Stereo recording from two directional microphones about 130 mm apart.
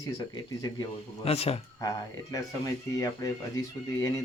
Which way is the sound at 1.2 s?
50° left (ahead or behind).